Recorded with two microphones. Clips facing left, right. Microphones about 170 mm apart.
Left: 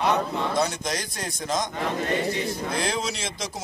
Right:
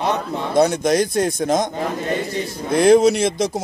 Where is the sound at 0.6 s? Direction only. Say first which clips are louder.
Right 16 dB; 55° right (ahead or behind).